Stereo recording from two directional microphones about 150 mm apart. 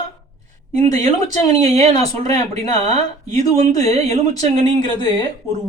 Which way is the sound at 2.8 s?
45° right (ahead or behind).